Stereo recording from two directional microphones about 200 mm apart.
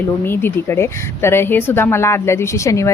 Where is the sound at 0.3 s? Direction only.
10° left (ahead or behind).